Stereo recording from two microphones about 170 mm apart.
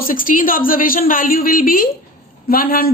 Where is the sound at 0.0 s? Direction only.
55° left (ahead or behind).